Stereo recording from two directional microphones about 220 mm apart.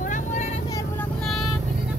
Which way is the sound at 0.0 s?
35° left (ahead or behind).